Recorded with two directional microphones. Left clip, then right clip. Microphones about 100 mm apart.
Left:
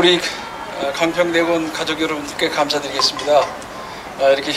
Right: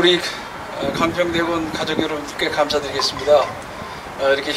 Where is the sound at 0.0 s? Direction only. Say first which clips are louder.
Left 1 dB; 30° left (ahead or behind).